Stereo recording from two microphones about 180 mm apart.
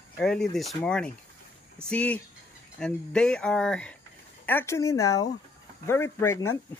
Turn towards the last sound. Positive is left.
turn(degrees=15)  # may be behind; listen again after turning